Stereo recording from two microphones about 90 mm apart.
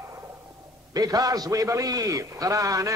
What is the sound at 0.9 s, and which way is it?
A man's voice, 45° right (ahead or behind).